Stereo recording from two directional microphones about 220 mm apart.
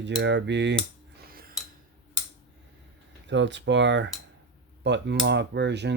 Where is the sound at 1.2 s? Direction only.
40° right (ahead or behind).